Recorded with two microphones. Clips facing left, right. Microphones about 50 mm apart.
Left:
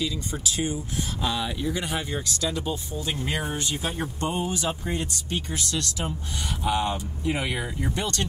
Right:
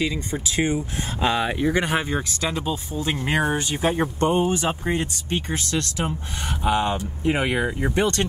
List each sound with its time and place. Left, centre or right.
0.0 s speech: right